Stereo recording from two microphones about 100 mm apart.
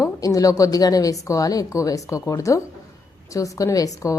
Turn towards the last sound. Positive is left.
turn(degrees=35)  # may be behind; listen again after turning